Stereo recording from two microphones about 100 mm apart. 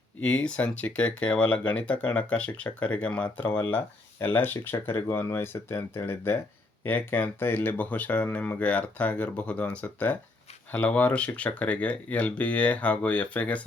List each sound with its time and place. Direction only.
0.2 s speech: 10° left (ahead or behind)